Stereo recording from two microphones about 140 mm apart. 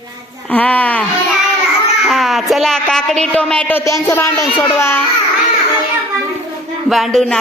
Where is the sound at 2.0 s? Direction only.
Centre (ahead or behind); by 5.0 s 15° left (ahead or behind).